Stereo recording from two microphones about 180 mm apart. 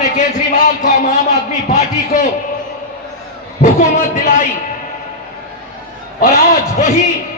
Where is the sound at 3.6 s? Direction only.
45° left (ahead or behind).